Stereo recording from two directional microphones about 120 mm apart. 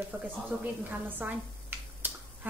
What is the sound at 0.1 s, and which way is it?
A woman's voice, 15° right (ahead or behind).